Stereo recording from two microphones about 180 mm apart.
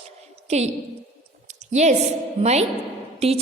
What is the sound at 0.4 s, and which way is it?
Speech, 35° right (ahead or behind).